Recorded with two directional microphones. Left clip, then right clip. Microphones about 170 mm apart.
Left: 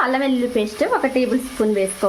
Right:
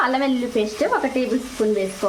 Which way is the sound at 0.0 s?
15° left (ahead or behind).